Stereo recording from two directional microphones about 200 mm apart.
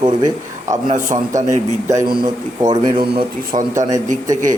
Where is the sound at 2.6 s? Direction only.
20° right (ahead or behind).